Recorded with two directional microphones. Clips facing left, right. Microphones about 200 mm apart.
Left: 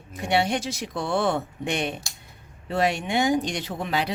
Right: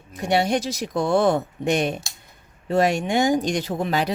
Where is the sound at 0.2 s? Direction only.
40° right (ahead or behind).